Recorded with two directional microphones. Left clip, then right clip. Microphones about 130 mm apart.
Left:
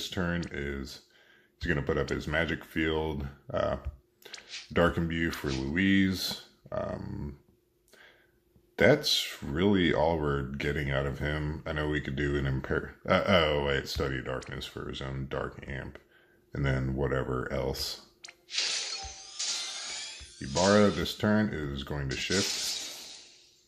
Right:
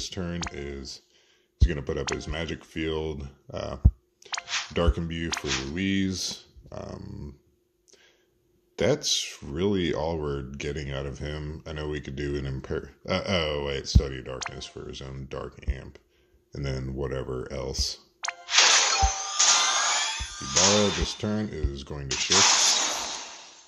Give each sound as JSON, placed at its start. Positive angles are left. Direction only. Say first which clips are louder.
{"t": 0.0, "sound": "speech", "louder": "even", "side_deg": -25}
{"t": 4.3, "sound": "music", "louder": "right 13 dB", "side_deg": -10}
{"t": 4.7, "sound": "speech", "louder": "left 6 dB", "side_deg": -25}
{"t": 5.3, "sound": "speech", "louder": "right 5 dB", "side_deg": -10}
{"t": 5.8, "sound": "speech", "louder": "left 1 dB", "side_deg": -30}
{"t": 8.7, "sound": "speech", "louder": "left 1 dB", "side_deg": -30}
{"t": 18.2, "sound": "music", "louder": "right 13 dB", "side_deg": -10}
{"t": 21.1, "sound": "speech", "louder": "left 2 dB", "side_deg": -25}
{"t": 22.0, "sound": "a sound", "louder": "right 10 dB", "side_deg": -10}